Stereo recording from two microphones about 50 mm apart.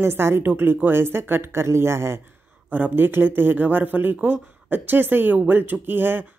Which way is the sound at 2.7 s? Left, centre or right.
Right.